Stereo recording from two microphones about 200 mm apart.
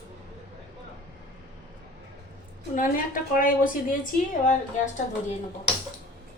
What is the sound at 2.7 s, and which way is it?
A woman's voice, 40° left (ahead or behind).